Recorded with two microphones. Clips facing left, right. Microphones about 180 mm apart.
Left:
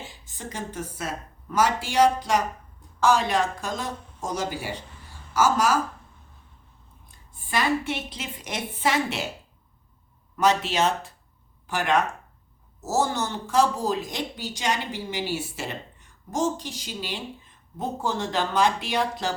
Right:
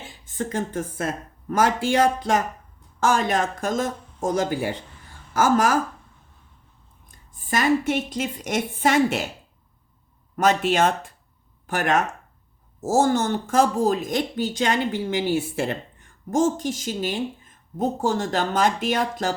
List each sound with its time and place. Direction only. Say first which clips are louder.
0.3 s speech: right 7 dB; 50° right (ahead or behind)
7.1 s speech: right 3 dB; 45° right (ahead or behind)
10.3 s speech: right 3 dB; 50° right (ahead or behind)